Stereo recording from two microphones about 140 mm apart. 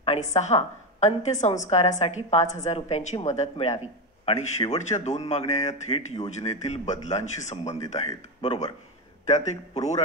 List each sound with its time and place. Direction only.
0.0 s a woman's voice: 50° left (ahead or behind)